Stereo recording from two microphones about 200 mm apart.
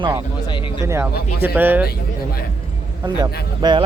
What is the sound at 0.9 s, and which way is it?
Speech, 10° right (ahead or behind).